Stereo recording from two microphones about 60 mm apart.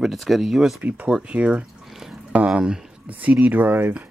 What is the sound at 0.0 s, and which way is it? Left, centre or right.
Speech, centre.